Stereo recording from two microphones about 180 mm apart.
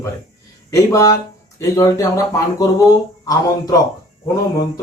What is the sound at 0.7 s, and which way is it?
Speech, 20° left (ahead or behind).